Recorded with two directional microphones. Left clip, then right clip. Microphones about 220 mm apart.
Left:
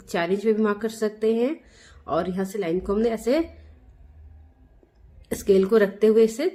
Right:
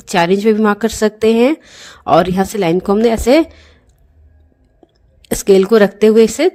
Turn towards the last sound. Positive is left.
turn(degrees=-40)  # may be behind; listen again after turning